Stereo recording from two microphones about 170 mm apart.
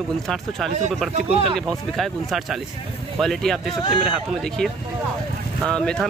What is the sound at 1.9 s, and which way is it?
Speech, centre (ahead or behind).